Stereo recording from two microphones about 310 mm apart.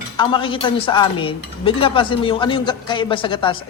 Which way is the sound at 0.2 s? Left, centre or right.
Centre.